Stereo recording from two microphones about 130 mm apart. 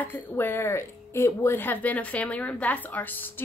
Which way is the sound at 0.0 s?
15° left (ahead or behind).